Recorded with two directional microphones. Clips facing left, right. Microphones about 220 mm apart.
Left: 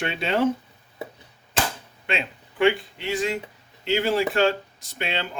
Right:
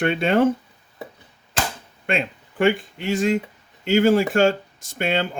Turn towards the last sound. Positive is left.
turn(degrees=-50)  # may be behind; listen again after turning